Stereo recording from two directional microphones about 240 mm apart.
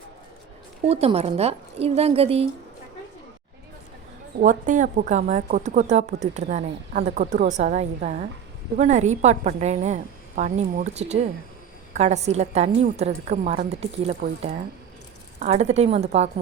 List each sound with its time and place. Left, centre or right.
0.9 s speech: right
4.4 s speech: right